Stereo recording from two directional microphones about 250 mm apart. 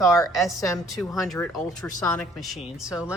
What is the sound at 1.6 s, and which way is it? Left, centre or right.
Speech, centre.